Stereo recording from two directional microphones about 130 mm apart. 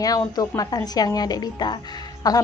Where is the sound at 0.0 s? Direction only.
30° left (ahead or behind).